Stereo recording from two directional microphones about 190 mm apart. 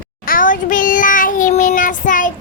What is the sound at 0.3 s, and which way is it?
Child singing, 45° left (ahead or behind).